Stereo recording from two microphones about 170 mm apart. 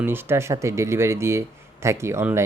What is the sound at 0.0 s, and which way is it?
Speech, 15° right (ahead or behind).